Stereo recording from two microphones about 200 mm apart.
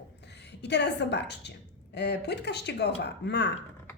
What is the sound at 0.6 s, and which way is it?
Speech, 60° left (ahead or behind).